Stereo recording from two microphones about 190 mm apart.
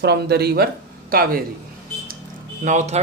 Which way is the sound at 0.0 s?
60° right (ahead or behind).